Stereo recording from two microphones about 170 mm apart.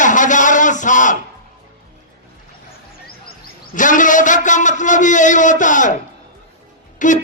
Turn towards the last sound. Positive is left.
turn(degrees=45)  # may be behind; listen again after turning